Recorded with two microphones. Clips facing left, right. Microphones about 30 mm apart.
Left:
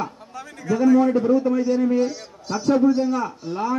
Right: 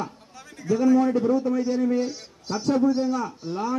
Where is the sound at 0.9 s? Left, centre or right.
Centre.